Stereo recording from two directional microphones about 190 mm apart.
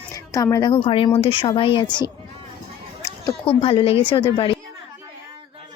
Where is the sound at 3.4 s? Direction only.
30° left (ahead or behind).